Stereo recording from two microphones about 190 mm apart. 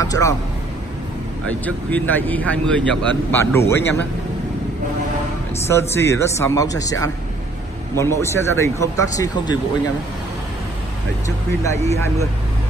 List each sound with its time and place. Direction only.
0.0 s speech: 15° left (ahead or behind)
1.9 s speech: 10° left (ahead or behind)
5.7 s speech: 15° left (ahead or behind)
11.6 s speech: 15° left (ahead or behind)